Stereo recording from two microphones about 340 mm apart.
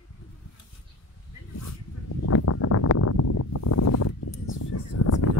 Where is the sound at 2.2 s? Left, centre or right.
Left.